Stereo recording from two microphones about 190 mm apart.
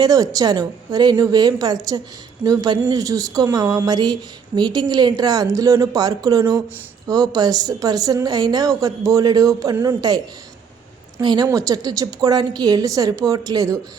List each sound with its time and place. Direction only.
0.0 s speech: 20° right (ahead or behind)
11.2 s speech: 20° right (ahead or behind)